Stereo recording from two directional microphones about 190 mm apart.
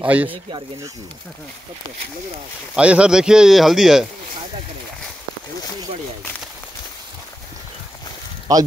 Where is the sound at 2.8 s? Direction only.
5° right (ahead or behind).